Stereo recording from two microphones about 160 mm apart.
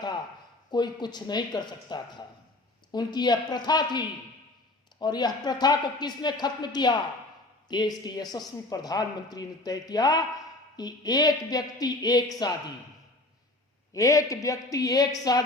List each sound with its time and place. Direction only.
0.7 s speech: 25° left (ahead or behind)
13.9 s speech: 20° left (ahead or behind)